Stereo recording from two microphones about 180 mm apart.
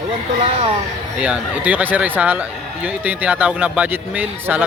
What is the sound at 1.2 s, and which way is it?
Speech, 10° right (ahead or behind).